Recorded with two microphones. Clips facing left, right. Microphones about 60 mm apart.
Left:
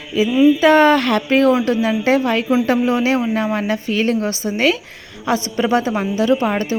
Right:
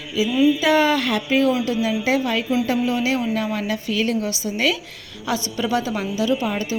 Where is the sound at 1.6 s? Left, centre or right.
Left.